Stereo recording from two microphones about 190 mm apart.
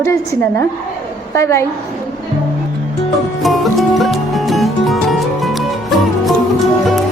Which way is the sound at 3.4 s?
Centre (ahead or behind).